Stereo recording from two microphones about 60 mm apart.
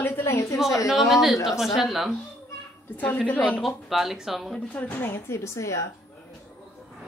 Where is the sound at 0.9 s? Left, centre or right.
Centre.